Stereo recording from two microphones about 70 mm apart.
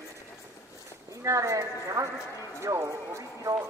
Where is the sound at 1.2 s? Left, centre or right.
Right.